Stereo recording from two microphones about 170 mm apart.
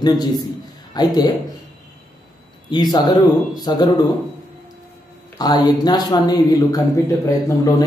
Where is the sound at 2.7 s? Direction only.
25° left (ahead or behind).